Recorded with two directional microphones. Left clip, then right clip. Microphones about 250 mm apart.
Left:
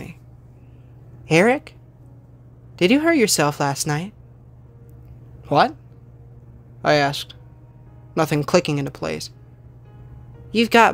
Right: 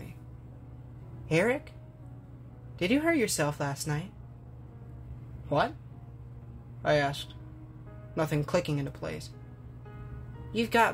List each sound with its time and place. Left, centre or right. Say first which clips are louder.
1.2 s speech: left 11 dB; left
2.8 s a woman's voice: left 10 dB; left
6.8 s a woman's voice: left 9 dB; left
10.5 s a woman's voice: left 11 dB; left